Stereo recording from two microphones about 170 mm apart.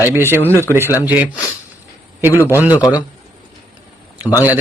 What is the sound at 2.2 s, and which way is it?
Speech, 15° right (ahead or behind).